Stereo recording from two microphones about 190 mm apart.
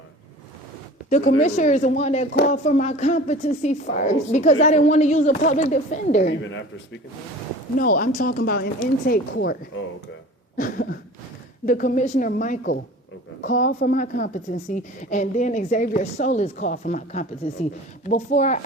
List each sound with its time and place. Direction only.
1.4 s a woman's voice: 40° left (ahead or behind)
6.3 s a man's voice: 80° left
7.8 s speech: 45° left (ahead or behind)
9.3 s speech: 70° left (ahead or behind)
10.6 s a woman's voice: 50° left (ahead or behind)